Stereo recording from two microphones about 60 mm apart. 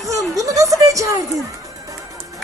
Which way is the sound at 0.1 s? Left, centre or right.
Right.